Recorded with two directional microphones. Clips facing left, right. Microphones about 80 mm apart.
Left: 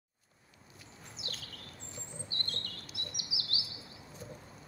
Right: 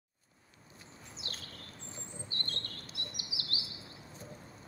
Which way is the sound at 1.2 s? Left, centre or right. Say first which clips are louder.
Left 1 dB; right.